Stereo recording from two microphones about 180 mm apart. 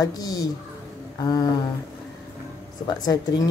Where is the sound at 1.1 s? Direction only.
20° left (ahead or behind).